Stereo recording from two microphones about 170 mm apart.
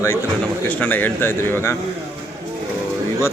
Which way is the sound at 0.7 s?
10° left (ahead or behind).